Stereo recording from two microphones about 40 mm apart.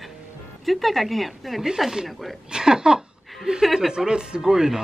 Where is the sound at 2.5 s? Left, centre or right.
Centre.